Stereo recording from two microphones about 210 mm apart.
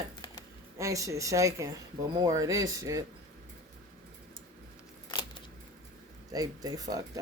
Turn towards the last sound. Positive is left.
turn(degrees=-15)  # may be behind; listen again after turning